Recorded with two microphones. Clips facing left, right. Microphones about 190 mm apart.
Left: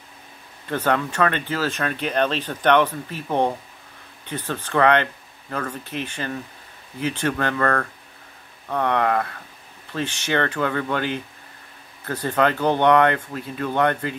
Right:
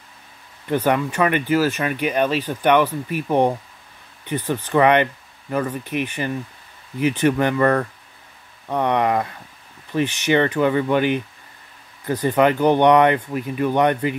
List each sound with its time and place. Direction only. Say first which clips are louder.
0.7 s speech: right 3 dB; 15° right (ahead or behind)